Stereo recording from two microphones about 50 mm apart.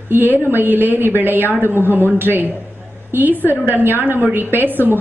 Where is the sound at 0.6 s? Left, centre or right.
Right.